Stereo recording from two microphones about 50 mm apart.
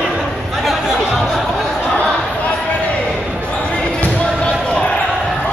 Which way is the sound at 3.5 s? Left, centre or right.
Left.